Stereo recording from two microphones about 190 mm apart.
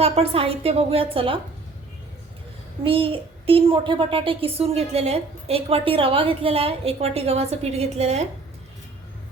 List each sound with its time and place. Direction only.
0.0 s a child's voice: 30° right (ahead or behind)
2.8 s a child's voice: 30° right (ahead or behind)